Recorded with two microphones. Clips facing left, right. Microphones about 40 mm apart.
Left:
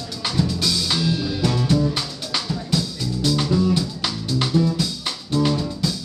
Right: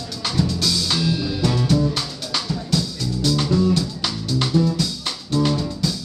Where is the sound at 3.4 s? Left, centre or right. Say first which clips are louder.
Right 1 dB; centre.